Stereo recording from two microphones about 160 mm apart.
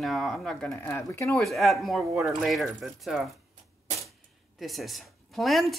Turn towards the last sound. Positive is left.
turn(degrees=0)  # may be behind; listen again after turning